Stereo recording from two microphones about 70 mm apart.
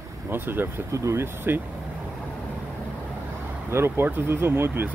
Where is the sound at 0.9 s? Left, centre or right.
Right.